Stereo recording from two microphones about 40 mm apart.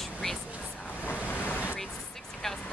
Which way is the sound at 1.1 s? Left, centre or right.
Left.